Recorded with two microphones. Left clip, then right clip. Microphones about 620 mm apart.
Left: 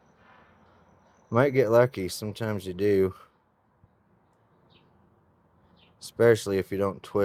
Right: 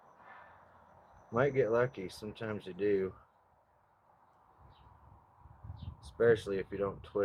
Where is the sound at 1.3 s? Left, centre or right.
Left.